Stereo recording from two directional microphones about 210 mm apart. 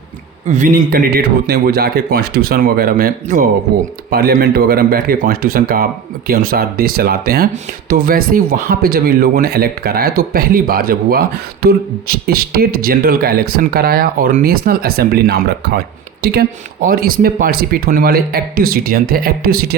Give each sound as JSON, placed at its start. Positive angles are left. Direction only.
{"t": 0.4, "sound": "speech", "side_deg": -35}